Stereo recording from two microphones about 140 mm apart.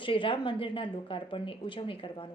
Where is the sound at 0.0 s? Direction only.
35° left (ahead or behind).